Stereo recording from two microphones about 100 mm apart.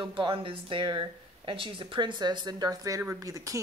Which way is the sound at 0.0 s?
55° right (ahead or behind).